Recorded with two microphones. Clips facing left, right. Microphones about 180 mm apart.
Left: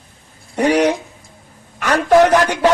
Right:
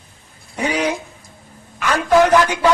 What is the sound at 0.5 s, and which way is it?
A woman's voice, 65° left (ahead or behind).